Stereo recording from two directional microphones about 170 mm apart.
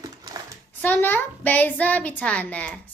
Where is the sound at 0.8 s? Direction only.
10° left (ahead or behind).